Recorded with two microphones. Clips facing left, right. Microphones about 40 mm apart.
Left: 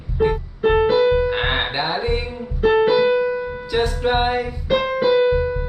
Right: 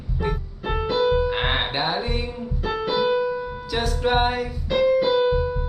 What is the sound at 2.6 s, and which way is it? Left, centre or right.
Music, left.